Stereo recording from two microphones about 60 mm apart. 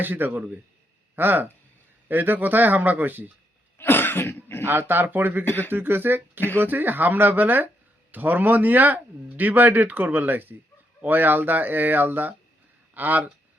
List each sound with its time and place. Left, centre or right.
0.0 s speech: right
3.8 s cough: left
4.6 s speech: right
5.5 s speech: left
5.7 s speech: right